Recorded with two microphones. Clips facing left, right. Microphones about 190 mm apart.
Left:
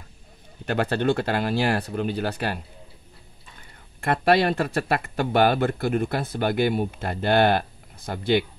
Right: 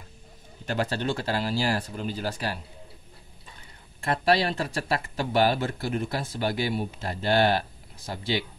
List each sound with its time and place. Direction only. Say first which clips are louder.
0.7 s speech: left 5 dB; 60° left (ahead or behind)
4.0 s speech: left 4 dB; 60° left (ahead or behind)